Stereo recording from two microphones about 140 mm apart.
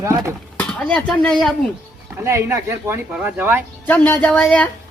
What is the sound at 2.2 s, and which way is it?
Speech, 20° right (ahead or behind).